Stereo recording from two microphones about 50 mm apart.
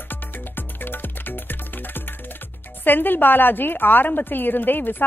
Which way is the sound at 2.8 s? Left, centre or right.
Left.